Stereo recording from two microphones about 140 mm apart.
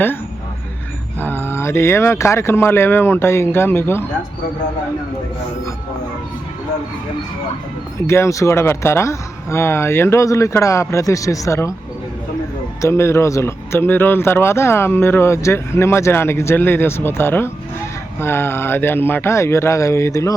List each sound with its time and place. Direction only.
1.2 s speech: 15° left (ahead or behind)
8.0 s speech: 20° left (ahead or behind)
12.8 s speech: 20° left (ahead or behind)